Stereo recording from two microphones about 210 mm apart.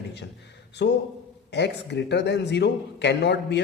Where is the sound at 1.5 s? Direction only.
55° left (ahead or behind).